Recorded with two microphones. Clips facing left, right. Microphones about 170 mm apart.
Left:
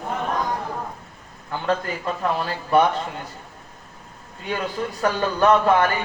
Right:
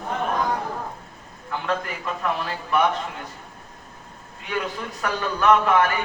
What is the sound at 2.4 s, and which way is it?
Speech, 35° left (ahead or behind).